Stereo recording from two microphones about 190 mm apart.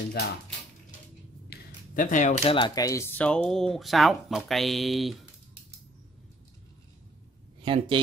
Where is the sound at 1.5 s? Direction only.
45° left (ahead or behind); by 5.2 s centre (ahead or behind).